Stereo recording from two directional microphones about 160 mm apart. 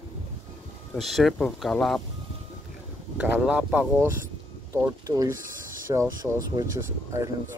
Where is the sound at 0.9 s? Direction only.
Centre (ahead or behind).